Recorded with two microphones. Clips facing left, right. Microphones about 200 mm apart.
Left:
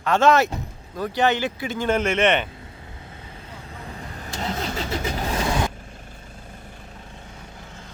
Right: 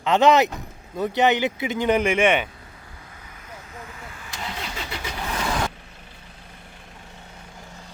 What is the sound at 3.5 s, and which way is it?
Vehicle, 30° left (ahead or behind).